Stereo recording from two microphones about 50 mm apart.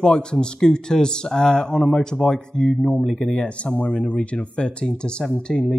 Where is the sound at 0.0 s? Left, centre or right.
Centre.